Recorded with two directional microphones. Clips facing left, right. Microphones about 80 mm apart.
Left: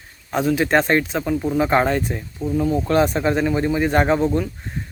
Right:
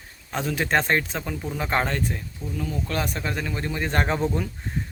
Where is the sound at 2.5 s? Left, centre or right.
Left.